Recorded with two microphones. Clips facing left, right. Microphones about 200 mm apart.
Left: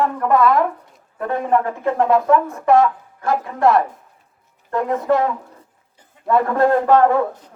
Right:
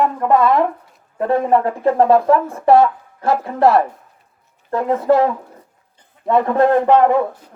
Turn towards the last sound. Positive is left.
turn(degrees=-15)  # may be behind; listen again after turning